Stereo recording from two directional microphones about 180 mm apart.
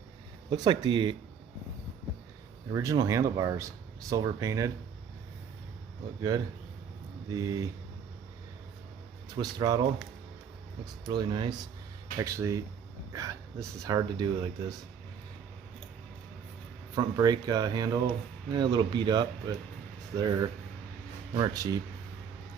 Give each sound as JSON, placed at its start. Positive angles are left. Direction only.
{"t": 0.5, "sound": "speech", "side_deg": -20}
{"t": 2.7, "sound": "speech", "side_deg": -20}
{"t": 7.3, "sound": "speech", "side_deg": -20}
{"t": 9.3, "sound": "speech", "side_deg": -20}
{"t": 11.1, "sound": "speech", "side_deg": -25}
{"t": 16.9, "sound": "speech", "side_deg": -20}